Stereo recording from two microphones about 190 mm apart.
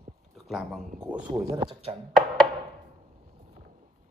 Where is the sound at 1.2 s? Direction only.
20° right (ahead or behind).